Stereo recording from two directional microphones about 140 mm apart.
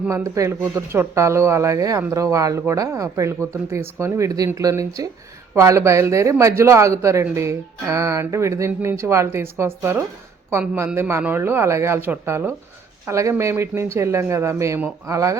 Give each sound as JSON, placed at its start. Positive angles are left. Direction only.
{"t": 0.1, "sound": "speech", "side_deg": -20}